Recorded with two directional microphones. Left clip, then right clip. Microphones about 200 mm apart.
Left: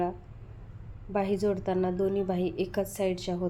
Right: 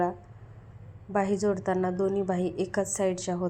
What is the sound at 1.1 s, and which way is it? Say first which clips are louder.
A woman's voice: right 1 dB; 5° right (ahead or behind).